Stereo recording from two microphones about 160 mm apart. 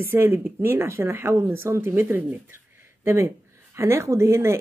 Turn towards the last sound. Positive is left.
turn(degrees=-15)  # may be behind; listen again after turning